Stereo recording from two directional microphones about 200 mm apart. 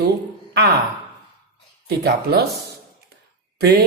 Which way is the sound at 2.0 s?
50° right (ahead or behind).